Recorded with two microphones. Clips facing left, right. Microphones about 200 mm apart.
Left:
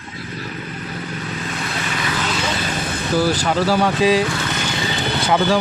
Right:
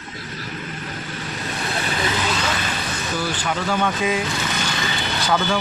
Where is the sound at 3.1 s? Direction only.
40° left (ahead or behind).